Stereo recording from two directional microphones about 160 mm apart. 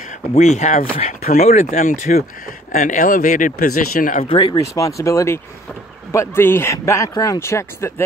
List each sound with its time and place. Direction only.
0.3 s speech: 45° left (ahead or behind)
4.2 s speech: 35° left (ahead or behind)
4.7 s speech: 20° left (ahead or behind)